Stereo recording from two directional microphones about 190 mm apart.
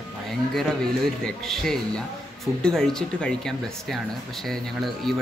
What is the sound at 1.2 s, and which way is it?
Speech, centre (ahead or behind).